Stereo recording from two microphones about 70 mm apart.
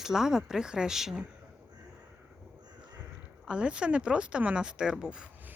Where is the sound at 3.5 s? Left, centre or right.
Centre.